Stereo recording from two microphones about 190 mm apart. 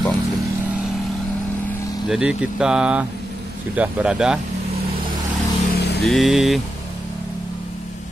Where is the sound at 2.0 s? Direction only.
5° right (ahead or behind).